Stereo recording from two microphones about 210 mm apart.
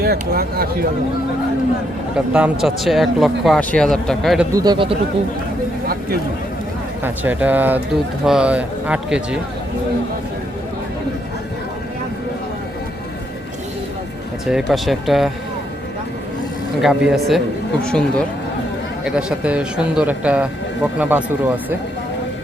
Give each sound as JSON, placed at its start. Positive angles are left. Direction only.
{"t": 0.0, "sound": "speech", "side_deg": -45}
{"t": 2.1, "sound": "speech", "side_deg": -5}
{"t": 4.5, "sound": "speech", "side_deg": -20}
{"t": 7.0, "sound": "speech", "side_deg": -10}
{"t": 14.4, "sound": "speech", "side_deg": 0}
{"t": 16.8, "sound": "speech", "side_deg": 0}